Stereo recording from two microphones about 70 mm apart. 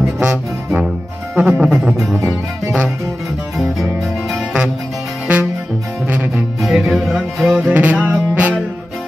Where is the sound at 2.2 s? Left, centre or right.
Right.